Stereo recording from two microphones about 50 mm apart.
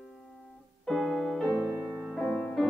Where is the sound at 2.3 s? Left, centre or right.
Left.